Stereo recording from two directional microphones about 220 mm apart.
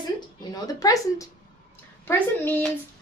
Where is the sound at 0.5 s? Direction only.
15° left (ahead or behind).